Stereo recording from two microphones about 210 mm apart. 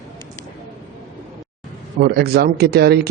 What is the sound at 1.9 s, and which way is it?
A man's voice, 50° right (ahead or behind).